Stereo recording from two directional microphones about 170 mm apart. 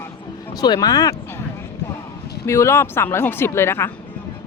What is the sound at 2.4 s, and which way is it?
Speech, 15° left (ahead or behind).